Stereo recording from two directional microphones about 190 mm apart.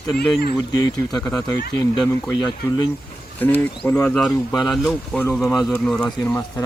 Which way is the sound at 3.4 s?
10° left (ahead or behind).